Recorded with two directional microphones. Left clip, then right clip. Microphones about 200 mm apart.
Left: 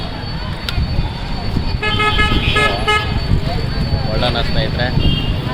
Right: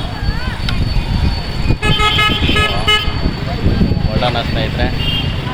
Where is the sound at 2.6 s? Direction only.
50° right (ahead or behind).